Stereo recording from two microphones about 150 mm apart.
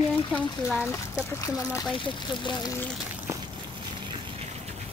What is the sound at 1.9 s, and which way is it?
Speech, 30° left (ahead or behind).